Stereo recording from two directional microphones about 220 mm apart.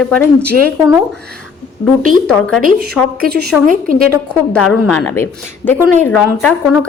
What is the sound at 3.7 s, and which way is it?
Speech, 40° right (ahead or behind).